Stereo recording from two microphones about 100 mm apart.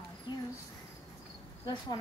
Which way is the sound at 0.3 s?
45° left (ahead or behind).